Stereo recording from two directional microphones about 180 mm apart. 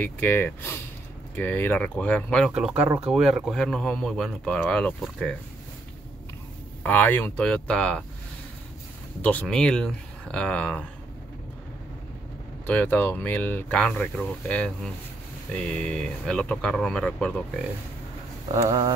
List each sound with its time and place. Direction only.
0.0 s speech: 10° left (ahead or behind)
6.8 s speech: 10° left (ahead or behind)
9.2 s speech: 5° left (ahead or behind)
12.6 s speech: 10° left (ahead or behind)
18.5 s speech: 20° right (ahead or behind)